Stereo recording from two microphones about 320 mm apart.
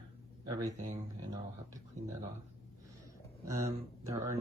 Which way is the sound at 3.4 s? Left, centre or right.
Centre.